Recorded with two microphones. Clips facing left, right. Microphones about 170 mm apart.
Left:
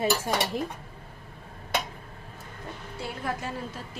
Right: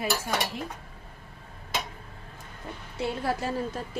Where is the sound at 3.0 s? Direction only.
35° right (ahead or behind).